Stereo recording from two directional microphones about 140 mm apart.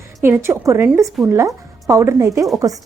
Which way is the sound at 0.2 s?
15° right (ahead or behind).